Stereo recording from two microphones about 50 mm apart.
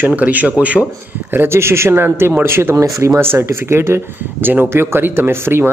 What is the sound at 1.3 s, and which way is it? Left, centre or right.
Speech, right.